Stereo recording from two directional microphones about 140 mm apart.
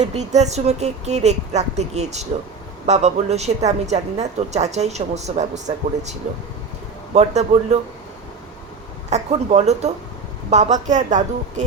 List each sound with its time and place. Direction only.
0.0 s a woman's voice: 55° right (ahead or behind)
9.0 s a woman's voice: 50° right (ahead or behind)